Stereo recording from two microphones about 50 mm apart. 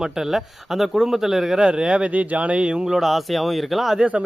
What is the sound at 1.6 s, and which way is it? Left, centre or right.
Speech, centre.